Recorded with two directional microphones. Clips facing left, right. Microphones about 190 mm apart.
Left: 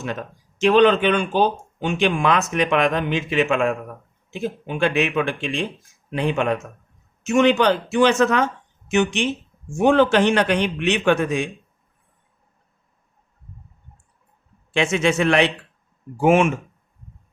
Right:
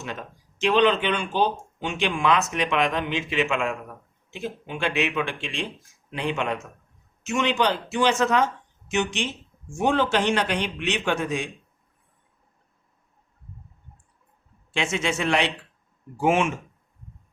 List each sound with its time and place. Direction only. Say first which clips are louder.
0.0 s a man's voice: left 6 dB; 45° left (ahead or behind)
14.7 s a man's voice: left 7 dB; 65° left (ahead or behind)
16.2 s speech: left 6 dB; 50° left (ahead or behind)